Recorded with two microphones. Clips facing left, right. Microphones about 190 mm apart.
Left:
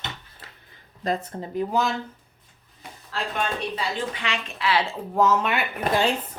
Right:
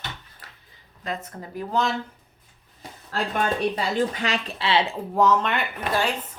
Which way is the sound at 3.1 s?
45° right (ahead or behind).